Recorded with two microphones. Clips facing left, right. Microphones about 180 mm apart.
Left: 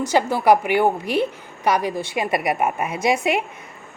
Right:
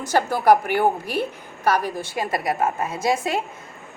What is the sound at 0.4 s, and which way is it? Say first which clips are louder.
Speech: even; 10° left (ahead or behind).